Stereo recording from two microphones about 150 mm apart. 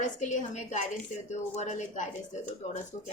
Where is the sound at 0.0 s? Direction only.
55° left (ahead or behind).